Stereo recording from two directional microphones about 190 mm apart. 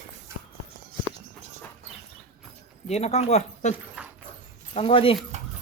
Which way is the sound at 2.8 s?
35° left (ahead or behind).